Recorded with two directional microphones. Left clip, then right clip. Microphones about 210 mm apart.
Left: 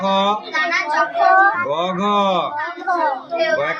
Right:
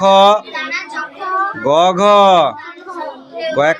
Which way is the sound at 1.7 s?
45° right (ahead or behind).